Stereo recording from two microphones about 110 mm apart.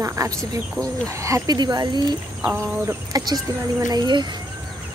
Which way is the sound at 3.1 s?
35° right (ahead or behind).